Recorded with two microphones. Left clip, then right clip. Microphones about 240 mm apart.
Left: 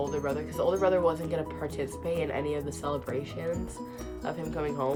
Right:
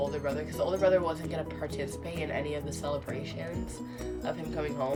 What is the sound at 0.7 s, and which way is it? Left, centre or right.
Speech, left.